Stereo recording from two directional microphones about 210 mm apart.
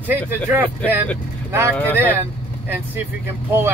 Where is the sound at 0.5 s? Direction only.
10° right (ahead or behind).